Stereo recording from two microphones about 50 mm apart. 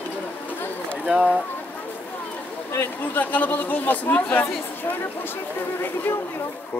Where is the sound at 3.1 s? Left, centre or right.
Left.